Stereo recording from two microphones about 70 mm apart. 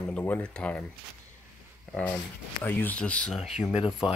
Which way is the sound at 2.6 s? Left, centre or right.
Left.